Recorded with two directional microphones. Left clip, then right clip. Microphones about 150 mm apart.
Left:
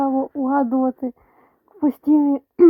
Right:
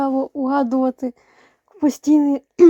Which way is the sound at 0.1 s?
10° right (ahead or behind).